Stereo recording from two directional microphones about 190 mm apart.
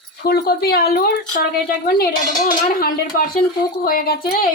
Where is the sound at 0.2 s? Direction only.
55° left (ahead or behind).